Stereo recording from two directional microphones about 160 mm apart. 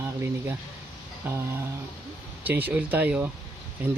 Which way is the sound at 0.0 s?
15° right (ahead or behind).